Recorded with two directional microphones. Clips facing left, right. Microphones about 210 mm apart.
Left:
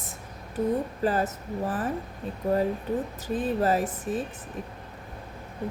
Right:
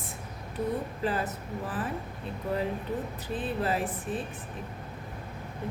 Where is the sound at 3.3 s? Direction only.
40° left (ahead or behind).